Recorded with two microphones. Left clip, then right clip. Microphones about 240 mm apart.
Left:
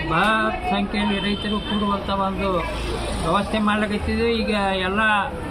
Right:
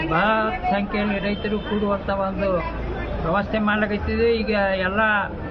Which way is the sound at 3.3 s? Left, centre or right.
Centre.